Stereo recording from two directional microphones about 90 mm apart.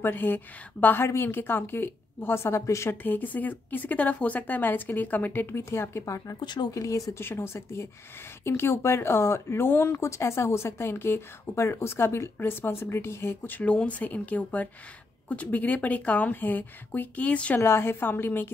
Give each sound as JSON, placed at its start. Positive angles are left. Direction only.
{"t": 0.0, "sound": "a woman's voice", "side_deg": 25}
{"t": 6.4, "sound": "speech", "side_deg": 55}
{"t": 6.7, "sound": "speech", "side_deg": 40}
{"t": 7.2, "sound": "a woman's voice", "side_deg": 25}
{"t": 17.6, "sound": "a woman's voice", "side_deg": 30}